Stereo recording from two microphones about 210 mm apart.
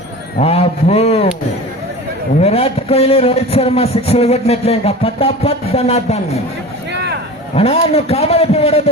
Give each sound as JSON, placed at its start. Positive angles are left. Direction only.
{"t": 0.4, "sound": "a man's voice", "side_deg": 30}
{"t": 2.4, "sound": "a man's voice", "side_deg": 30}
{"t": 6.9, "sound": "a sound", "side_deg": -50}
{"t": 7.5, "sound": "a man's voice", "side_deg": 30}